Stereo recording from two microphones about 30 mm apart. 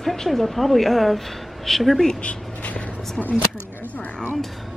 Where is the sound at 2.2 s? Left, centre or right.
Left.